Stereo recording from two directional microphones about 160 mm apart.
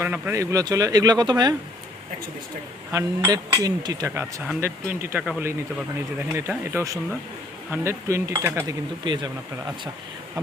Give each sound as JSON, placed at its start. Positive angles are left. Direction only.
{"t": 0.0, "sound": "speech", "side_deg": -15}
{"t": 2.9, "sound": "speech", "side_deg": -20}
{"t": 9.0, "sound": "speech", "side_deg": -25}